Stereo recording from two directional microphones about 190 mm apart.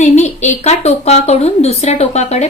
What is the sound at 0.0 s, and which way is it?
Speech, 35° left (ahead or behind).